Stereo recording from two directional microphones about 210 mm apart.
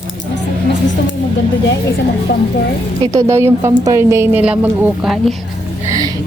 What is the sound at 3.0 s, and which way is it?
A woman's voice, 15° right (ahead or behind).